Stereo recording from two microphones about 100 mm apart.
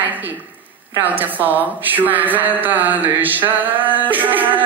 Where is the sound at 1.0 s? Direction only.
20° right (ahead or behind).